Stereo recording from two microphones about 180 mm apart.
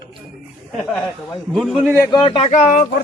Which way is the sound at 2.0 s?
25° left (ahead or behind).